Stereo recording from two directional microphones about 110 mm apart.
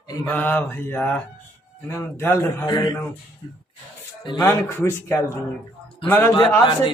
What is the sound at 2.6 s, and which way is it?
Speech, 40° left (ahead or behind).